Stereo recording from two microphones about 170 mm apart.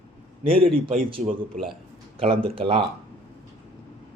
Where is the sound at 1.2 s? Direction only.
45° right (ahead or behind).